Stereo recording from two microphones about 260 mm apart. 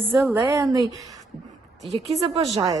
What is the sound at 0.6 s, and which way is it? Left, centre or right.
Speech, centre.